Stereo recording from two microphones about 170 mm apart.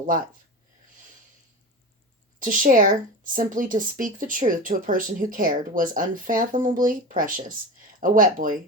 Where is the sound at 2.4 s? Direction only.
55° right (ahead or behind).